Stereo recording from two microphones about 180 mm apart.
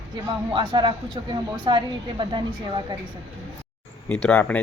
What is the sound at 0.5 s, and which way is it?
A woman's voice, 25° right (ahead or behind).